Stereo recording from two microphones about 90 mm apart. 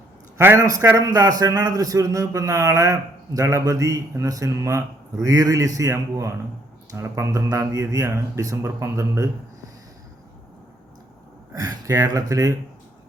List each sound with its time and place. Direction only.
0.3 s a man's voice: 30° right (ahead or behind)
11.5 s a man's voice: 40° right (ahead or behind)